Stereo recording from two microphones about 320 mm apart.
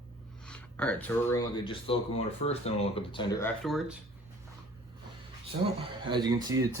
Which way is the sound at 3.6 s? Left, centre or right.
Centre.